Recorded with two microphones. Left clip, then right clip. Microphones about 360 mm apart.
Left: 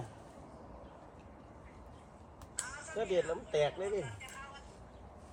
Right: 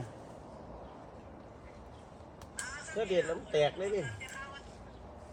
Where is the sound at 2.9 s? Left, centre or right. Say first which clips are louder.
Right 2 dB; centre.